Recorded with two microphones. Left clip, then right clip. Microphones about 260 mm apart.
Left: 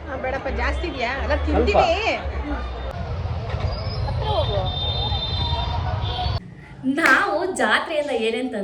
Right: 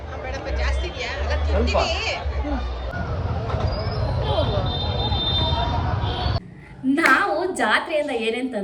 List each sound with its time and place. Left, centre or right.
0.3 s chatter: centre
6.9 s a woman's voice: centre